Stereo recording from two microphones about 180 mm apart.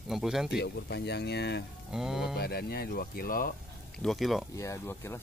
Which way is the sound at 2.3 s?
60° left (ahead or behind).